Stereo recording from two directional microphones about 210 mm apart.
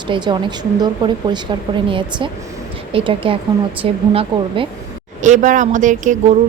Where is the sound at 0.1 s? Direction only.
20° right (ahead or behind).